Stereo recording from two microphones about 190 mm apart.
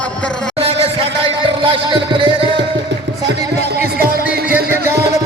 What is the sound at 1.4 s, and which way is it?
Music, 25° right (ahead or behind).